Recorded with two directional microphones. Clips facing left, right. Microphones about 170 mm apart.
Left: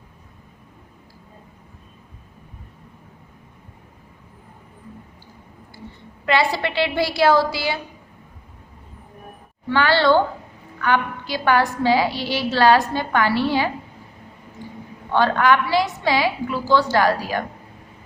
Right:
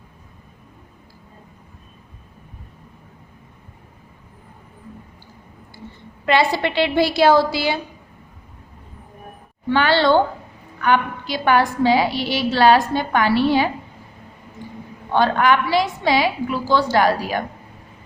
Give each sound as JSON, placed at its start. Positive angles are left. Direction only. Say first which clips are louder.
{"t": 6.2, "sound": "a woman's voice", "louder": "right 2 dB", "side_deg": -25}
{"t": 9.6, "sound": "a woman's voice", "louder": "right 1 dB", "side_deg": -20}
{"t": 15.1, "sound": "a woman's voice", "louder": "right 1 dB", "side_deg": -15}